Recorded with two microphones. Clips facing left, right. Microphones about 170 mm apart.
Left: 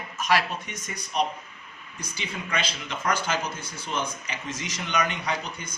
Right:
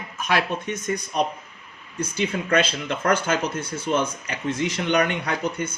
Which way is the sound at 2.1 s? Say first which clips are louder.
Right 10 dB; 60° right (ahead or behind).